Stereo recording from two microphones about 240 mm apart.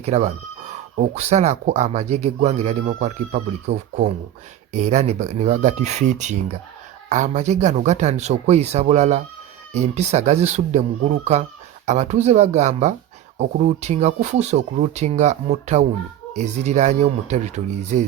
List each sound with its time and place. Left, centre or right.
0.0 s speech: right